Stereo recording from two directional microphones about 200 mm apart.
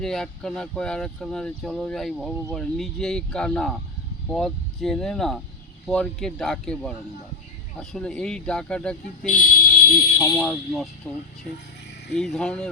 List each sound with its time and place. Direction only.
0.0 s speech: centre (ahead or behind)
9.3 s speech: 45° left (ahead or behind)
10.2 s speech: 10° left (ahead or behind)
12.1 s speech: centre (ahead or behind)